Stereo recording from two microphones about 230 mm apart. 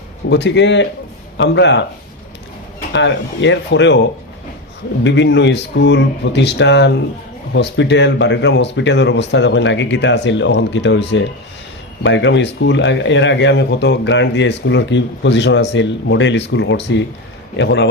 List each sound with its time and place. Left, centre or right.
0.3 s speech: left
2.9 s speech: left
5.0 s speech: left